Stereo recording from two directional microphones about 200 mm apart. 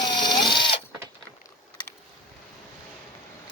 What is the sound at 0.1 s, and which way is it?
Sewing machine, 20° left (ahead or behind).